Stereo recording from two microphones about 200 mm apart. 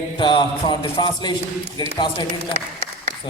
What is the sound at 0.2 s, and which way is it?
A man's voice, 25° left (ahead or behind).